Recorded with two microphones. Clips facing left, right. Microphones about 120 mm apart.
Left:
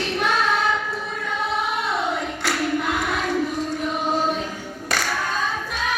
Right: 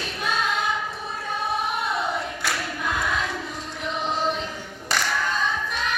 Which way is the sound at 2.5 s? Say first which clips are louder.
Left 7 dB; 65° left (ahead or behind).